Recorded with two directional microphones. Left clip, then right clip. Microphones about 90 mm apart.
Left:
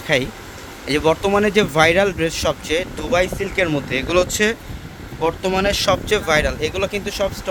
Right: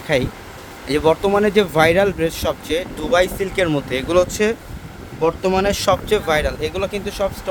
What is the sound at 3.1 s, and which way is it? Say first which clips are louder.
Speech: right 2 dB; 50° right (ahead or behind).